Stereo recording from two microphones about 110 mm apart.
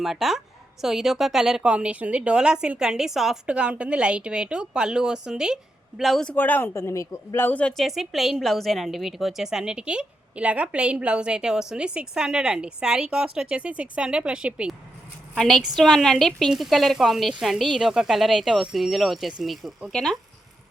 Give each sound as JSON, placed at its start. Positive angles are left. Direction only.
{"t": 0.0, "sound": "a woman's voice", "side_deg": 0}
{"t": 6.3, "sound": "speech", "side_deg": 15}
{"t": 7.8, "sound": "a woman's voice", "side_deg": 0}